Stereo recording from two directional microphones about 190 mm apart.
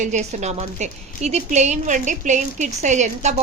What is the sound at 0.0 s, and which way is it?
A woman's voice, 40° right (ahead or behind).